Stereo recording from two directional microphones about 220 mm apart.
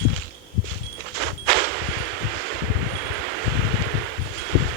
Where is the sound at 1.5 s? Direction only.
50° right (ahead or behind).